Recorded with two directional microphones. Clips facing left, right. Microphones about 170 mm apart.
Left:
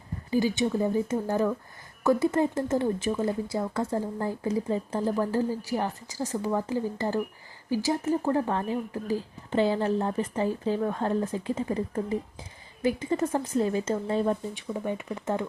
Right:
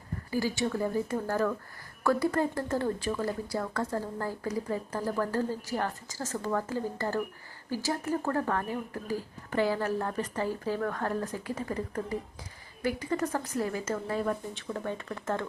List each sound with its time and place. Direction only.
0.3 s speech: 20° left (ahead or behind)
14.7 s speech: 15° left (ahead or behind)